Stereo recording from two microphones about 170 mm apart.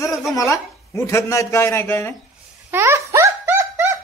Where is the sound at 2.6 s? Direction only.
15° right (ahead or behind).